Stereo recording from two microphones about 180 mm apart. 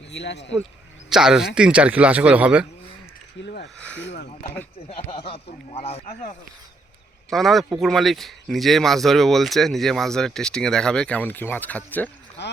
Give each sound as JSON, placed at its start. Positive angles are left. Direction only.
{"t": 0.1, "sound": "speech", "side_deg": 75}
{"t": 1.1, "sound": "a man's voice", "side_deg": -5}
{"t": 3.4, "sound": "speech", "side_deg": 65}
{"t": 3.8, "sound": "speech", "side_deg": 5}
{"t": 4.0, "sound": "speech", "side_deg": 75}
{"t": 5.0, "sound": "speech", "side_deg": 35}
{"t": 7.3, "sound": "a man's voice", "side_deg": 0}
{"t": 12.4, "sound": "a sound", "side_deg": 75}